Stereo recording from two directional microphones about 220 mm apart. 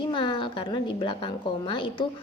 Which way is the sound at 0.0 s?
20° left (ahead or behind).